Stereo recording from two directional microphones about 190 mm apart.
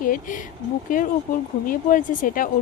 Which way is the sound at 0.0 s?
45° left (ahead or behind).